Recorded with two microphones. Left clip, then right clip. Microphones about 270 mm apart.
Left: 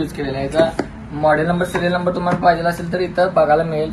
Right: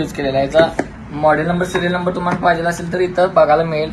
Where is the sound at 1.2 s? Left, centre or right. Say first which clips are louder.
Right 1 dB; centre.